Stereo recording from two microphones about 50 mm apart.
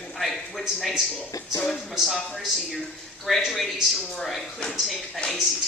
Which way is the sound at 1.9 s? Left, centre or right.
Centre.